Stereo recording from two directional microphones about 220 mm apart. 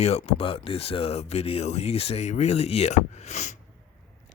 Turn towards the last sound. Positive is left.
turn(degrees=30)  # may be behind; listen again after turning